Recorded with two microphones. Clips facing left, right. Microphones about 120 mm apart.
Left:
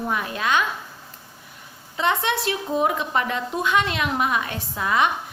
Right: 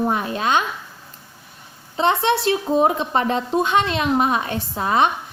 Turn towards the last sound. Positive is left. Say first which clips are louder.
# right 3 dB
turn(degrees=-30)  # may be behind; listen again after turning